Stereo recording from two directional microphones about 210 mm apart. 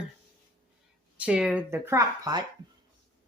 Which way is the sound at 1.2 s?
5° right (ahead or behind).